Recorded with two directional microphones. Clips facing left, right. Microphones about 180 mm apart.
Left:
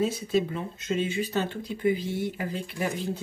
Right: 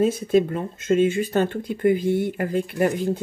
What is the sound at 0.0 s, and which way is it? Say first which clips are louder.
Speech: right 7 dB; 50° right (ahead or behind).